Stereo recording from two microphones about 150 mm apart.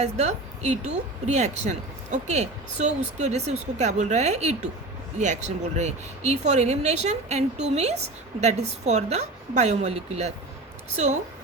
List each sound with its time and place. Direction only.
0.2 s speech: 50° right (ahead or behind)